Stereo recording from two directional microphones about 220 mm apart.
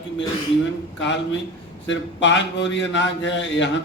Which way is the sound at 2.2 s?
55° left (ahead or behind).